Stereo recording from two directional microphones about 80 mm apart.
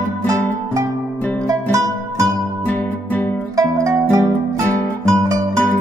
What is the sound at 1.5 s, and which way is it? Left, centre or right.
Music, right.